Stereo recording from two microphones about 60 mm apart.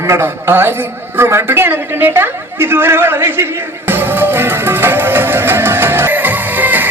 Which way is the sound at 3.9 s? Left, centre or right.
Right.